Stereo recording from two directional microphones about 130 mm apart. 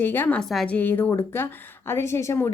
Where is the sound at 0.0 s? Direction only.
15° left (ahead or behind).